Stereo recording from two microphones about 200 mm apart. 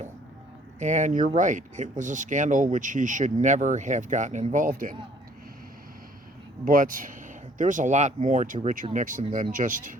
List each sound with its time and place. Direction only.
0.8 s speech: 35° right (ahead or behind)
6.7 s speech: 45° right (ahead or behind)